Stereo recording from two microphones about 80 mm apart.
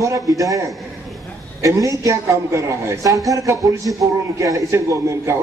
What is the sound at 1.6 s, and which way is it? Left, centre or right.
A man's voice, right.